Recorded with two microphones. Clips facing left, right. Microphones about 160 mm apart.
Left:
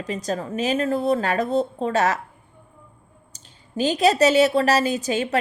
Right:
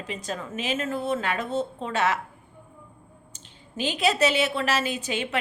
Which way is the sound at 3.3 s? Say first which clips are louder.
Left 8 dB; 40° left (ahead or behind).